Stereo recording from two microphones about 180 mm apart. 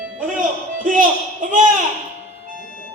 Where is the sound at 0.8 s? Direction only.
50° right (ahead or behind).